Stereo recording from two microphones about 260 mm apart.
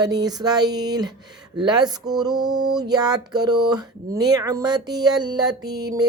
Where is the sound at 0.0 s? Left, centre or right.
Centre.